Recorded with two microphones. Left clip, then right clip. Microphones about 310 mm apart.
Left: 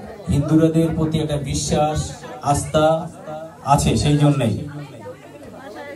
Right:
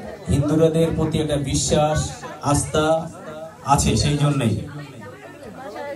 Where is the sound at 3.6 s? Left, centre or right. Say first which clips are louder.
Left 1 dB; left.